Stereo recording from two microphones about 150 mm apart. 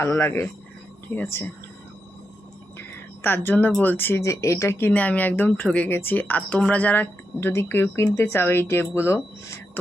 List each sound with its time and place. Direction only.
0.0 s speech: 15° left (ahead or behind)
2.7 s speech: 15° left (ahead or behind)